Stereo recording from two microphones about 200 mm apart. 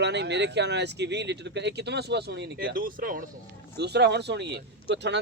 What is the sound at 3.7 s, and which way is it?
A man's voice, 55° right (ahead or behind).